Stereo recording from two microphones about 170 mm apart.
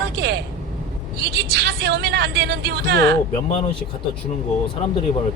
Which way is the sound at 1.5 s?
70° right (ahead or behind).